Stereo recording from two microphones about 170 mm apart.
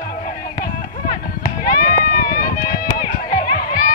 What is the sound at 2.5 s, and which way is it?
Run, 60° left (ahead or behind).